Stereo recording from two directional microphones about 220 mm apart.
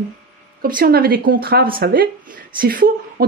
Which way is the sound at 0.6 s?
40° right (ahead or behind).